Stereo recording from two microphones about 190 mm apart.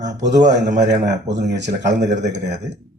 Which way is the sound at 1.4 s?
65° right (ahead or behind).